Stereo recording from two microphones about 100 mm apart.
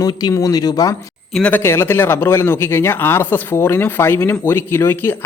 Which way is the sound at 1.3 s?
15° left (ahead or behind).